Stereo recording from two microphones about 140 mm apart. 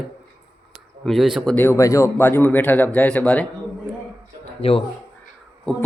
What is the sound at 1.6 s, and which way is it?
A man's voice, 15° left (ahead or behind).